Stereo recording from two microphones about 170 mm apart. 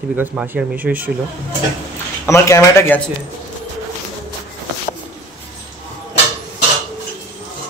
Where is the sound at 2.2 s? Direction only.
15° left (ahead or behind).